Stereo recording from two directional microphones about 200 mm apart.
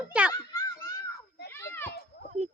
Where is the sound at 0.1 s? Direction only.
5° right (ahead or behind).